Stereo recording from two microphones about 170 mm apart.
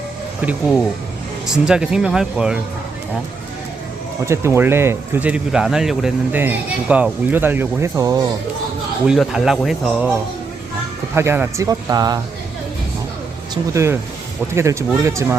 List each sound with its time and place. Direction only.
1.5 s speech: 5° right (ahead or behind)
4.3 s speech: 15° right (ahead or behind)
9.0 s speech: 5° right (ahead or behind); by 12.2 s 20° right (ahead or behind)
13.5 s speech: 15° right (ahead or behind)